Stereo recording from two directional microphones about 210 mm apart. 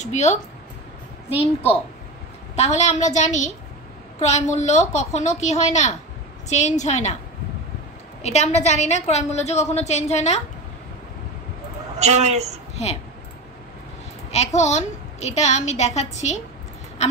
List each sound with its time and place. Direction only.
0.0 s a woman's voice: 35° left (ahead or behind)
8.2 s a woman's voice: 30° left (ahead or behind)
12.0 s speech: 30° right (ahead or behind)
14.3 s a woman's voice: 30° left (ahead or behind)